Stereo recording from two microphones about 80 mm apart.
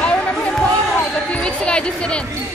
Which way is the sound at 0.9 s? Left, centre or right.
Centre.